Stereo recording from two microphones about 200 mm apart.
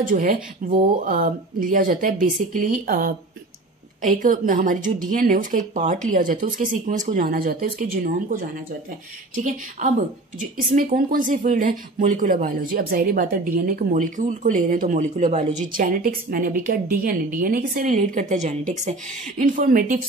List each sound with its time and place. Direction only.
0.0 s speech: 40° right (ahead or behind)
9.3 s a sound: 40° right (ahead or behind)
10.7 s speech: 40° right (ahead or behind)